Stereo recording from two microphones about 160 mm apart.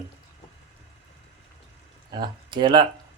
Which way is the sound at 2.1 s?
30° right (ahead or behind).